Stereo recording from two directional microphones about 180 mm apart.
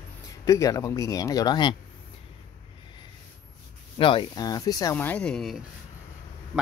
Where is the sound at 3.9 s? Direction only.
25° left (ahead or behind).